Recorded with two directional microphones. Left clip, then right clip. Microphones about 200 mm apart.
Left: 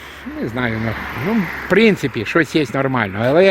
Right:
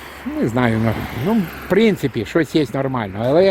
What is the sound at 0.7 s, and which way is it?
Speech, 60° right (ahead or behind).